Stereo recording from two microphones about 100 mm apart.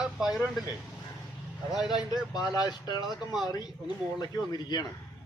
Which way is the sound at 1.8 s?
45° left (ahead or behind).